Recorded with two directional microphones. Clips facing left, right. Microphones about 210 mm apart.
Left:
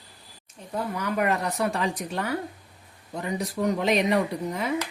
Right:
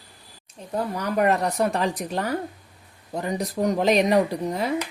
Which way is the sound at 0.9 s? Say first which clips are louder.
Right 4 dB; 35° right (ahead or behind).